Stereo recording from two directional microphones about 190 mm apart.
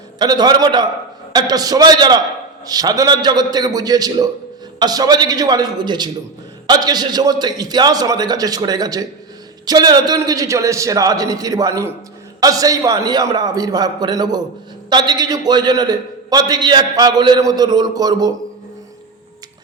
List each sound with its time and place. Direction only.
0.2 s a man's voice: 20° right (ahead or behind)